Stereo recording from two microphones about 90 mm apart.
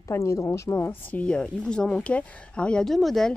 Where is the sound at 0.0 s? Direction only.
35° left (ahead or behind).